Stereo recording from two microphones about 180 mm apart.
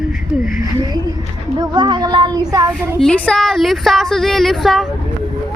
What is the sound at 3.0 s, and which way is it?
Speech, 5° left (ahead or behind).